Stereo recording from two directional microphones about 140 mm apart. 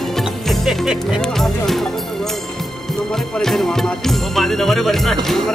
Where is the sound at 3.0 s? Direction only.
5° left (ahead or behind).